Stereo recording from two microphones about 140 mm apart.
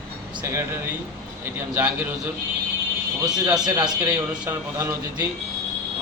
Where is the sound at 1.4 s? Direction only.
15° right (ahead or behind).